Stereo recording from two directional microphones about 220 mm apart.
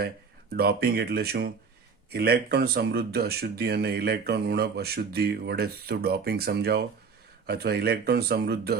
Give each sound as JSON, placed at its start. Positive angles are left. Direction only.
{"t": 0.5, "sound": "speech", "side_deg": -45}